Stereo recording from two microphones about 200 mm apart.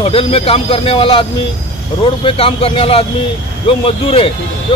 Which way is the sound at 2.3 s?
30° left (ahead or behind).